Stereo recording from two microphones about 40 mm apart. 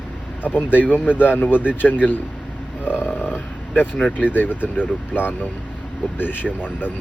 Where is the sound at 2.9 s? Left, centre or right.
Left.